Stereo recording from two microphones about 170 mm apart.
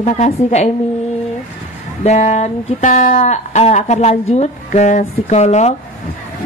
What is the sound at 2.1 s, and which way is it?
Speech, 40° left (ahead or behind).